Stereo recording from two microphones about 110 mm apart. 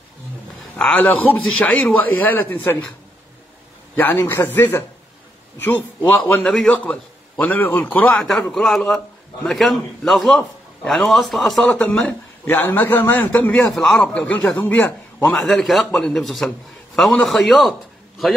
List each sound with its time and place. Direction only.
0.7 s speech: 10° left (ahead or behind)
4.0 s speech: 20° left (ahead or behind)
8.1 s a man's voice: 5° left (ahead or behind)
13.6 s speech: centre (ahead or behind)
15.2 s a man's voice: 5° left (ahead or behind)